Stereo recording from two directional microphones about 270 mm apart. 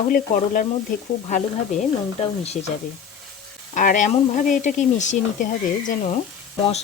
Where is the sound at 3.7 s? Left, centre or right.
Left.